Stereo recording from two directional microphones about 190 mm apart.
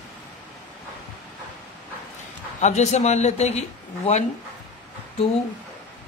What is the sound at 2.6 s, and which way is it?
A man's voice, 35° left (ahead or behind).